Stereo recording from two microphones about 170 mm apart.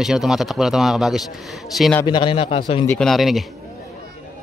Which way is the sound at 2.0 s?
30° left (ahead or behind).